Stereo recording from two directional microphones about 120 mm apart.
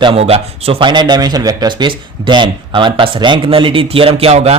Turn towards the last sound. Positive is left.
turn(degrees=-60)  # may be behind; listen again after turning